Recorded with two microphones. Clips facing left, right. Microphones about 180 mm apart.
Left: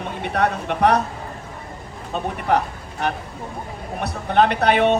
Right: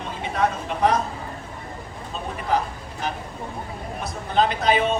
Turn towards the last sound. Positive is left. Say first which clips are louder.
# left 4 dB
turn(degrees=65)  # may be behind; listen again after turning